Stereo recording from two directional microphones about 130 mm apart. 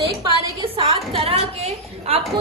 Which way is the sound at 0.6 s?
45° right (ahead or behind).